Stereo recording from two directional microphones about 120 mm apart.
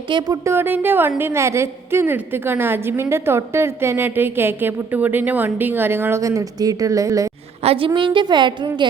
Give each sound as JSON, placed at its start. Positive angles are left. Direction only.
{"t": 0.1, "sound": "a woman's voice", "side_deg": -40}
{"t": 0.4, "sound": "a woman's voice", "side_deg": -20}
{"t": 7.6, "sound": "a woman's voice", "side_deg": -50}